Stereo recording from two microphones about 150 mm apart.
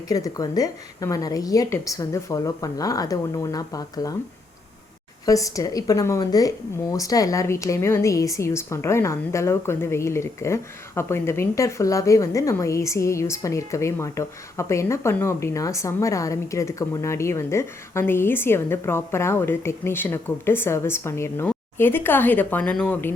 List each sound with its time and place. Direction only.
0.1 s speech: 25° left (ahead or behind)
5.2 s speech: 20° left (ahead or behind)